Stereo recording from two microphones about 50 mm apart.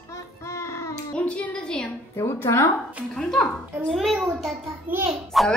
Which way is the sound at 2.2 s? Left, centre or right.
Left.